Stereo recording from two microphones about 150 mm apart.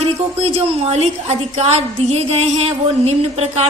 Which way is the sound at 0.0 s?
40° right (ahead or behind).